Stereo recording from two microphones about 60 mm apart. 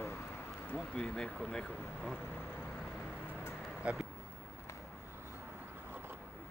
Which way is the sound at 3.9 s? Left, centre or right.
Right.